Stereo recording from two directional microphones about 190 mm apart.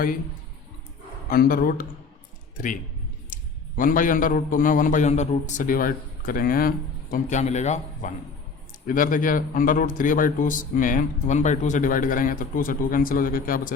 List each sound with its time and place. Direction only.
1.3 s a man's voice: 50° left (ahead or behind)
3.8 s a man's voice: 45° left (ahead or behind)